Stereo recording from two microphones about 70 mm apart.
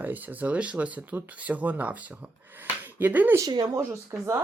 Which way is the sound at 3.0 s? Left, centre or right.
Right.